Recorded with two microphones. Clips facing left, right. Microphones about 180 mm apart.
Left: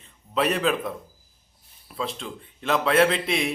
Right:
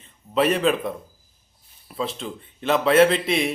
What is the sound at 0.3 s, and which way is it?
A man's voice, centre (ahead or behind).